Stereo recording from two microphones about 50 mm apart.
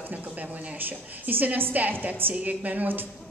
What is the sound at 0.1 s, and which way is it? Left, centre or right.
A woman's voice, right.